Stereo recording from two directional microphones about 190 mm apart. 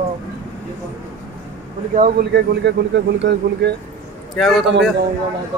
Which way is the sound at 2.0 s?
45° right (ahead or behind).